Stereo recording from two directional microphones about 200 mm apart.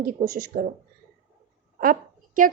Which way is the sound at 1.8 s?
45° right (ahead or behind).